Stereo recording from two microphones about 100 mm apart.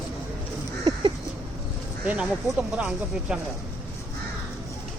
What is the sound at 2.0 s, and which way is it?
Speech, 15° right (ahead or behind).